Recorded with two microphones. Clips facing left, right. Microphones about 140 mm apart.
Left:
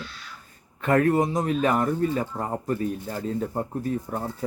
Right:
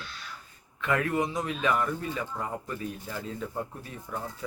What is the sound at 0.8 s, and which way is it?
Speech, 45° left (ahead or behind).